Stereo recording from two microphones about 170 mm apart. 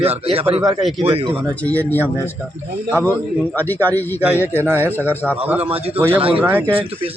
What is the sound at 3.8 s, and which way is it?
Speech, 10° left (ahead or behind).